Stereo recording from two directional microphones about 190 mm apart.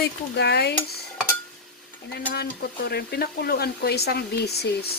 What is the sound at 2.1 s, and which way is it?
Speech, 55° left (ahead or behind).